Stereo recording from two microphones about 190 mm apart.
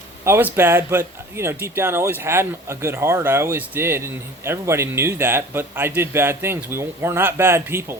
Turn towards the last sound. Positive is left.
turn(degrees=-15)  # may be behind; listen again after turning